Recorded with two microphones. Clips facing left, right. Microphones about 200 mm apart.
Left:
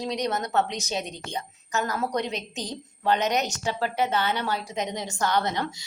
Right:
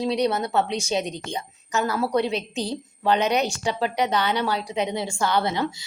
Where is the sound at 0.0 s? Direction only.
10° right (ahead or behind).